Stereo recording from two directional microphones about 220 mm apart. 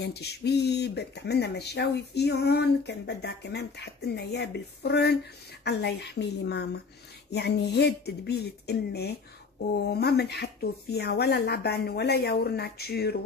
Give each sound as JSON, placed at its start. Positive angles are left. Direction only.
{"t": 0.0, "sound": "speech", "side_deg": 50}